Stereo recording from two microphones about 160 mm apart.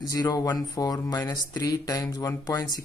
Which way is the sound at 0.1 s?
20° left (ahead or behind).